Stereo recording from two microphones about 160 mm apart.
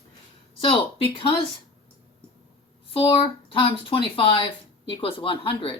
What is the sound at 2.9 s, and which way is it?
Speech, 35° left (ahead or behind).